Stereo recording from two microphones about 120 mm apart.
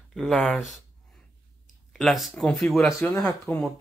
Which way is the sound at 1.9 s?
Centre (ahead or behind).